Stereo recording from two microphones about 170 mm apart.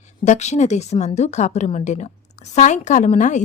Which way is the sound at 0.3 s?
40° left (ahead or behind).